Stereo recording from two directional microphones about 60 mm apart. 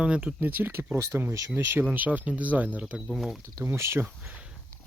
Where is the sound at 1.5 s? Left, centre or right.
Right.